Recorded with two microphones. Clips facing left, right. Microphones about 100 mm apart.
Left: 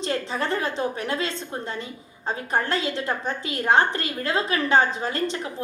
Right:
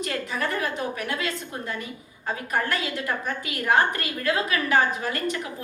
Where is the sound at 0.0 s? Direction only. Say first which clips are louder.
Left 2 dB; 30° left (ahead or behind).